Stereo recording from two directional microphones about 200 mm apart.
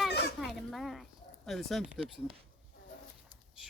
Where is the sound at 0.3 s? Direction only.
Centre (ahead or behind).